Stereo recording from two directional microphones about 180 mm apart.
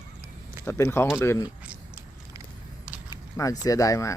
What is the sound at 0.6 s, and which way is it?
Speech, 15° left (ahead or behind).